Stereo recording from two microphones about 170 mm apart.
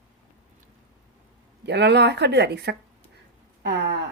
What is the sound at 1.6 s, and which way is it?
Speech, 80° right.